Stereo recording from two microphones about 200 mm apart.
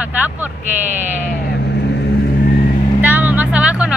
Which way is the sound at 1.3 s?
50° left (ahead or behind).